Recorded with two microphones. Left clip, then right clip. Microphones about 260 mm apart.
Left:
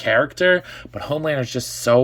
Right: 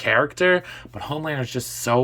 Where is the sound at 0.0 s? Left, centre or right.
Centre.